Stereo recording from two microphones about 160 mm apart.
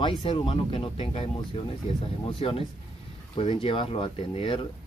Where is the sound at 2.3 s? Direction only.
35° left (ahead or behind).